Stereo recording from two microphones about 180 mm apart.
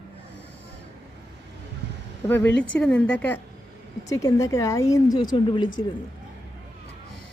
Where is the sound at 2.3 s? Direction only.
10° left (ahead or behind); by 5.8 s 25° left (ahead or behind).